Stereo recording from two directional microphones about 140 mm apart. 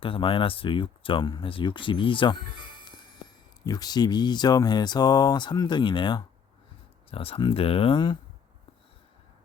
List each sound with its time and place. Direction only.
0.0 s speech: 40° left (ahead or behind)
3.6 s speech: 25° left (ahead or behind)